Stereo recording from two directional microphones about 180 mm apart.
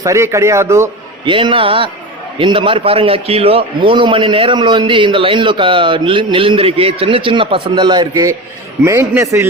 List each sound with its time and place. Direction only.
0.0 s a man's voice: 15° right (ahead or behind)
1.2 s a man's voice: 30° right (ahead or behind)